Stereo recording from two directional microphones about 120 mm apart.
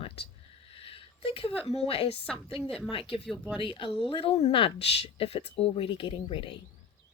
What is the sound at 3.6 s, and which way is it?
Speech, 45° left (ahead or behind).